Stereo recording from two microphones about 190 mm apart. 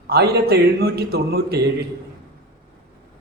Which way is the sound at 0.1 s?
55° right (ahead or behind).